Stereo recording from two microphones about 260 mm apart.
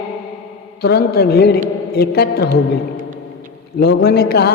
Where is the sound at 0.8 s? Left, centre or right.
Left.